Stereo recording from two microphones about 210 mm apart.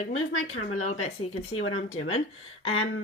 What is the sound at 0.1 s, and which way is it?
Speech, 75° left (ahead or behind).